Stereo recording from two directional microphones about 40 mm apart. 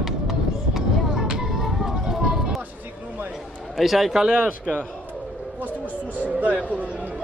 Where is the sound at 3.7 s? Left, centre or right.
Centre.